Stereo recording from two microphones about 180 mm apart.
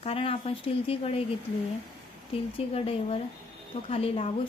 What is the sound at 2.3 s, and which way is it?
A woman's voice, 30° left (ahead or behind).